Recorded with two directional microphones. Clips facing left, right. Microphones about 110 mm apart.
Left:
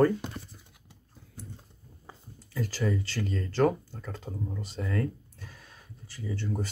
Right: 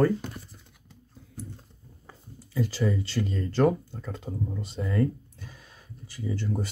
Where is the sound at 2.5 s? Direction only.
15° right (ahead or behind).